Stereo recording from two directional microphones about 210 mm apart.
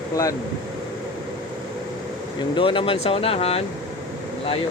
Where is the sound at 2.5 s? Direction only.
25° left (ahead or behind).